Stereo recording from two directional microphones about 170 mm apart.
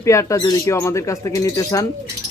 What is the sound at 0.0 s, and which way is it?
Speech, 15° left (ahead or behind).